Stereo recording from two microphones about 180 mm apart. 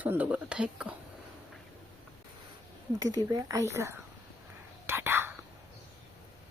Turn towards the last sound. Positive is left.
turn(degrees=-15)  # may be behind; listen again after turning